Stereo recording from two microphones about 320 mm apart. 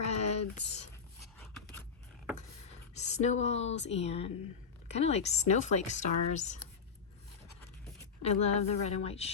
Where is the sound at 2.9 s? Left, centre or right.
Left.